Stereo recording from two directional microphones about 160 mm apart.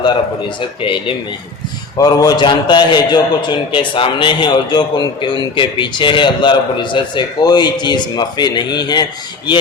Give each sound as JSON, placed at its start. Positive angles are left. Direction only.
{"t": 0.0, "sound": "a man's voice", "side_deg": 30}